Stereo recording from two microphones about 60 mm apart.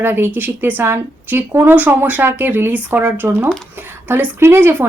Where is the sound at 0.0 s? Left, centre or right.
Right.